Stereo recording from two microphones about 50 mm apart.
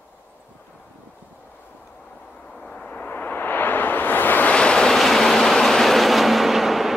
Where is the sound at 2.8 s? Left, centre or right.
Left.